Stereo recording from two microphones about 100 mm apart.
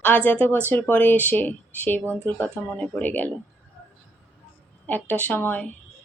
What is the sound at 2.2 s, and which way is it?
Speech, 15° left (ahead or behind).